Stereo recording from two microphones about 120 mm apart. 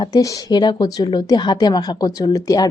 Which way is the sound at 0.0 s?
35° left (ahead or behind).